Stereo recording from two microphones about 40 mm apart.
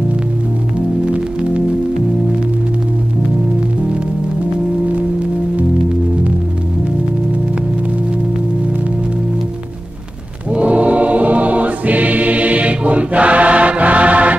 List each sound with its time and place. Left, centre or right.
10.5 s choir: right